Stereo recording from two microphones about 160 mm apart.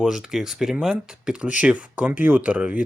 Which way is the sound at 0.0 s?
5° right (ahead or behind).